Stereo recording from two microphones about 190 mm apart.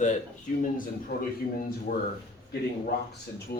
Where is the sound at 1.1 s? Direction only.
55° left (ahead or behind).